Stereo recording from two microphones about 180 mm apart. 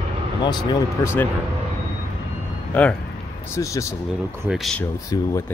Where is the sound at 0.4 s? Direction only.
25° left (ahead or behind).